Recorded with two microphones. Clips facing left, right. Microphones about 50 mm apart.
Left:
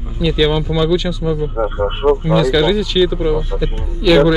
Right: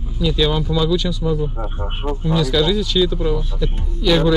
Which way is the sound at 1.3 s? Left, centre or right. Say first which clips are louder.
Left 7 dB; left.